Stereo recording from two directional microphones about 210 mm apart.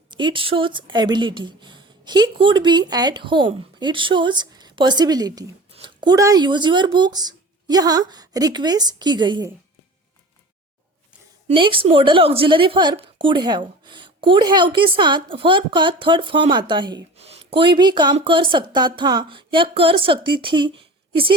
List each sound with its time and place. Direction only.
0.1 s a woman's voice: 20° right (ahead or behind)
11.4 s a woman's voice: 25° right (ahead or behind)